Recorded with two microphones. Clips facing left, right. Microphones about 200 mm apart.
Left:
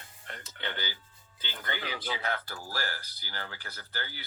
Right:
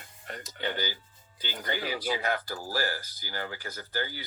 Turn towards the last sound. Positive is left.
turn(degrees=-15)  # may be behind; listen again after turning